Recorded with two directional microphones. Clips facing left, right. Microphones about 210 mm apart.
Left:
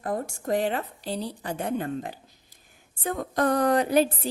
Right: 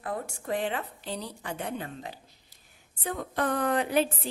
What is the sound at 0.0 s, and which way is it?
A woman's voice, 40° left (ahead or behind).